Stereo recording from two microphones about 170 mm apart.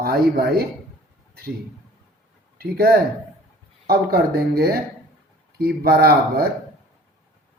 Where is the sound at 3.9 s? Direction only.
65° right (ahead or behind).